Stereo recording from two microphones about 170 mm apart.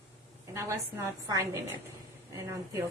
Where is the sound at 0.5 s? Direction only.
15° right (ahead or behind).